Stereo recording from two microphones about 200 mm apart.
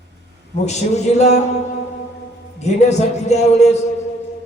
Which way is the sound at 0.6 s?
35° left (ahead or behind).